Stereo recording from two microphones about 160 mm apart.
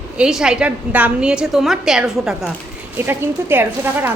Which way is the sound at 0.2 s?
5° right (ahead or behind).